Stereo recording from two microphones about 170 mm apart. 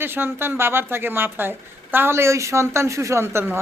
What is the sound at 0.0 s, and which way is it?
Speech, 15° right (ahead or behind).